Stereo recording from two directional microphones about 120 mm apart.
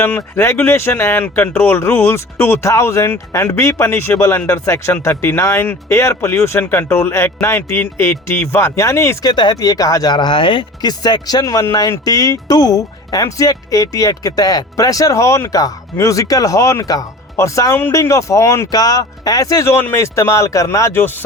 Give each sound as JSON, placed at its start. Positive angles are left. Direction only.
{"t": 0.3, "sound": "speech", "side_deg": 20}
{"t": 9.3, "sound": "speech", "side_deg": 35}